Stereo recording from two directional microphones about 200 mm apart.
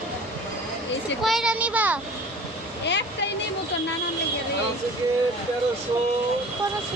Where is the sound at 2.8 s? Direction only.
60° left (ahead or behind).